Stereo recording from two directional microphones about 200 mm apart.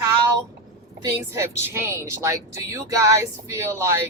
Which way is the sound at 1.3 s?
10° right (ahead or behind).